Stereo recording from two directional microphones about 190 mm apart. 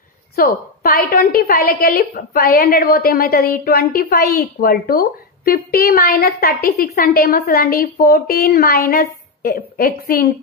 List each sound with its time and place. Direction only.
0.4 s a woman's voice: 50° left (ahead or behind)